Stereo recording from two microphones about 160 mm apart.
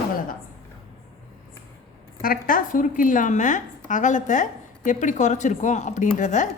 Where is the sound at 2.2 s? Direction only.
60° left (ahead or behind).